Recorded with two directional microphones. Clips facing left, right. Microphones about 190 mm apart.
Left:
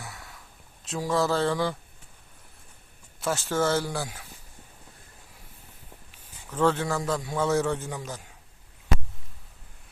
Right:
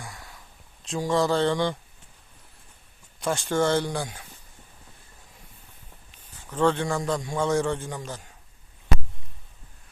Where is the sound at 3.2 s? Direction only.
5° left (ahead or behind).